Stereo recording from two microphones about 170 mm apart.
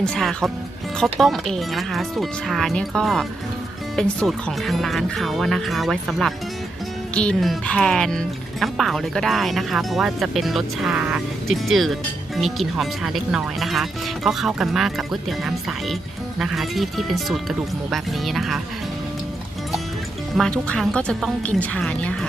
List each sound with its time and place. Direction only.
0.0 s speech: 5° left (ahead or behind)
20.7 s speech: 5° left (ahead or behind)